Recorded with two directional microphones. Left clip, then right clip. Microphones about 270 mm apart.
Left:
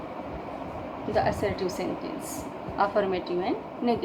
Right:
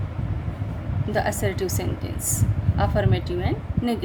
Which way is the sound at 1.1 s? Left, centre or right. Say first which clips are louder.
Right 1 dB; right.